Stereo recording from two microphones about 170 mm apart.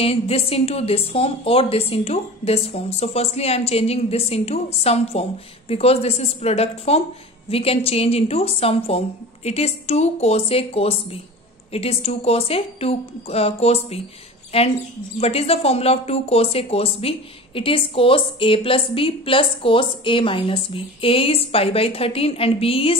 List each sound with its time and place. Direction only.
0.0 s a woman's voice: 35° left (ahead or behind)